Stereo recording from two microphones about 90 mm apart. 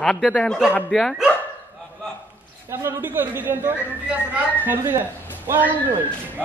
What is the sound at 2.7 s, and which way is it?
A woman's voice, 25° right (ahead or behind).